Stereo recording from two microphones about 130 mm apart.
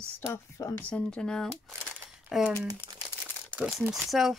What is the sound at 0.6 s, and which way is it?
Speech, 25° left (ahead or behind).